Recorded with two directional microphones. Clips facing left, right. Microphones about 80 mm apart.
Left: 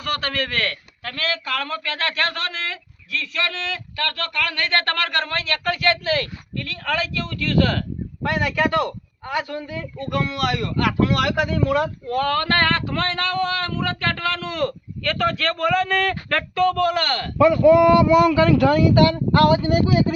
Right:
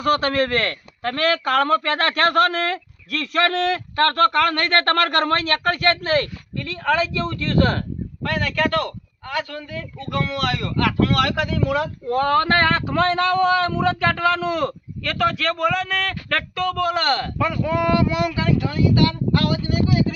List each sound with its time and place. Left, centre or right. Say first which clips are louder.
0.0 s a man's voice: right 7 dB; right
6.6 s a man's voice: right 4 dB; right
8.2 s a man's voice: left 1 dB; centre
12.0 s speech: right 3 dB; right
15.0 s a man's voice: right 1 dB; centre
16.6 s speech: even; centre
18.5 s speech: left 7 dB; left
18.8 s speech: left 3 dB; left